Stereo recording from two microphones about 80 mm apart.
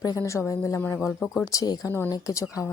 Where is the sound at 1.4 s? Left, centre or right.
Left.